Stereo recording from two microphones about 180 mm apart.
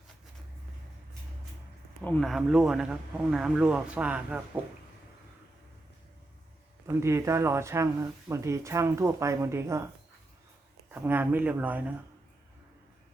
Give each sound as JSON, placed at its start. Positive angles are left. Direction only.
{"t": 2.0, "sound": "speech", "side_deg": 5}
{"t": 6.8, "sound": "speech", "side_deg": -15}
{"t": 10.9, "sound": "speech", "side_deg": -10}